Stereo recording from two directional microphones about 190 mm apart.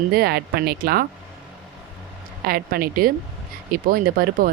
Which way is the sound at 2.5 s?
50° right (ahead or behind).